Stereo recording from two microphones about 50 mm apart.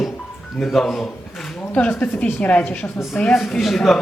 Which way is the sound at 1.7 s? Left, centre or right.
Left.